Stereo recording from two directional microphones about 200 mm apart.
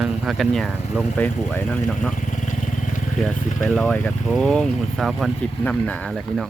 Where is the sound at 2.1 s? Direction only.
40° left (ahead or behind).